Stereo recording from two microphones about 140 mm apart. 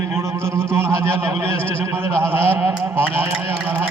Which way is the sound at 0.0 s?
20° right (ahead or behind).